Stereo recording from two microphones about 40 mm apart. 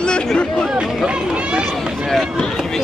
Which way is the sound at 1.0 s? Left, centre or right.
Right.